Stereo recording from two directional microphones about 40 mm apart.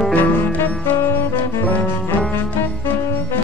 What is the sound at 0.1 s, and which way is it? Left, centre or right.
Music, left.